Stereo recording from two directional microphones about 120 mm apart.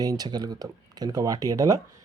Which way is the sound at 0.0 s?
35° right (ahead or behind).